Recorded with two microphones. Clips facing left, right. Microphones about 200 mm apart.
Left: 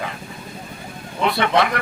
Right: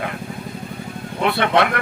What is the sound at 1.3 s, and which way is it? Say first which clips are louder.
Speech: right 1 dB; 60° right (ahead or behind).